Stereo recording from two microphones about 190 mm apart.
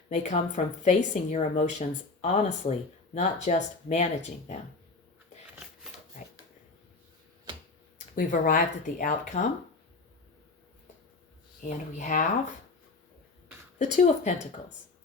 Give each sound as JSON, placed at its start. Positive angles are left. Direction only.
{"t": 0.1, "sound": "speech", "side_deg": 40}
{"t": 7.9, "sound": "speech", "side_deg": 45}
{"t": 11.6, "sound": "speech", "side_deg": 45}
{"t": 13.9, "sound": "speech", "side_deg": 40}